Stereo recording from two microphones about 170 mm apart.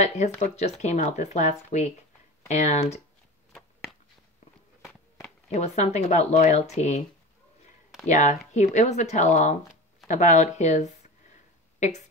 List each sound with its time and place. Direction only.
0.0 s speech: 40° left (ahead or behind)
5.5 s speech: 40° left (ahead or behind)
8.1 s speech: 45° left (ahead or behind)